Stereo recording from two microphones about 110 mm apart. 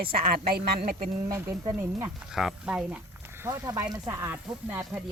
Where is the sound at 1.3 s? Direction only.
25° right (ahead or behind).